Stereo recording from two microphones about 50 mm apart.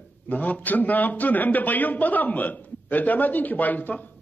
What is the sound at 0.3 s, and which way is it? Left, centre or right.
A man's voice, left.